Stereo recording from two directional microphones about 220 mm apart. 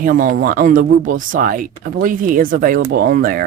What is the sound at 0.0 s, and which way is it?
Speech, 40° right (ahead or behind).